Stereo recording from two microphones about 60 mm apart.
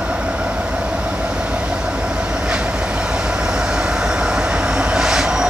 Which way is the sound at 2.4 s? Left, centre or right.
Centre.